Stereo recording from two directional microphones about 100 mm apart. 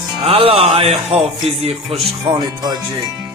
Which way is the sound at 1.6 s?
85° right.